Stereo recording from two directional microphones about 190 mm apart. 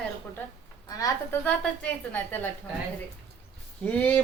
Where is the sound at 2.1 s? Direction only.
10° left (ahead or behind).